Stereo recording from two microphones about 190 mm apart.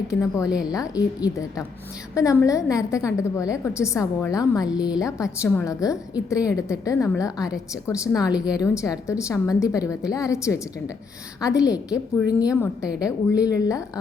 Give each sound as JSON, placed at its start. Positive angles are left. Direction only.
{"t": 0.2, "sound": "a woman's voice", "side_deg": 15}
{"t": 8.3, "sound": "a woman's voice", "side_deg": -5}
{"t": 8.8, "sound": "a woman's voice", "side_deg": 15}
{"t": 11.6, "sound": "a woman's voice", "side_deg": -5}
{"t": 13.0, "sound": "a woman's voice", "side_deg": 20}